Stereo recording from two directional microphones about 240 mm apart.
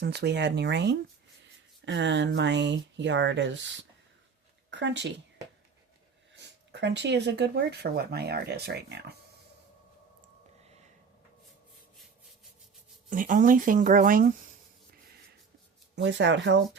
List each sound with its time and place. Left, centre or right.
0.0 s speech: right
4.7 s speech: right
6.3 s speech: right
13.1 s speech: right
16.0 s speech: right